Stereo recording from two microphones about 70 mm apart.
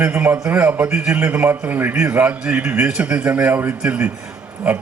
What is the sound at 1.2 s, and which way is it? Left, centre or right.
A man's voice, right.